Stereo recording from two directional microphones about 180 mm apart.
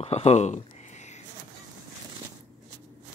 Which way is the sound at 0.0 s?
35° left (ahead or behind).